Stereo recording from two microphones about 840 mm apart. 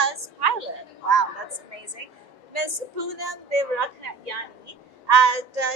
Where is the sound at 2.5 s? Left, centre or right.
Right.